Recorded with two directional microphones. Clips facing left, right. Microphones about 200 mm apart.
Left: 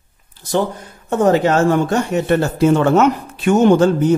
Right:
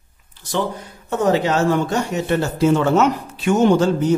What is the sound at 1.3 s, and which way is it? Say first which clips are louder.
Speech: left 2 dB; 50° left (ahead or behind).